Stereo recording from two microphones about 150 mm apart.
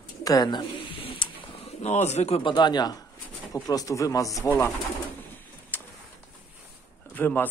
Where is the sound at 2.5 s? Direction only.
30° left (ahead or behind).